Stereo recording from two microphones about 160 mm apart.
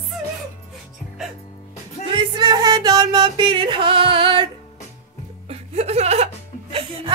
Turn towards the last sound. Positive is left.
turn(degrees=-35)  # may be behind; listen again after turning